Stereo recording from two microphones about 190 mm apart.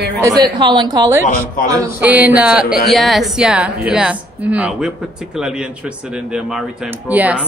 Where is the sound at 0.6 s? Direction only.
25° right (ahead or behind).